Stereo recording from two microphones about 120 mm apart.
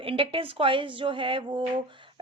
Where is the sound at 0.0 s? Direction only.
50° right (ahead or behind).